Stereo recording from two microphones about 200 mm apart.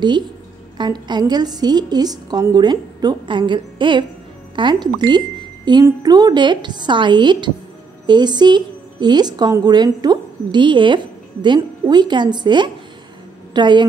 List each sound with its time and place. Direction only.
0.7 s a woman's voice: 20° right (ahead or behind)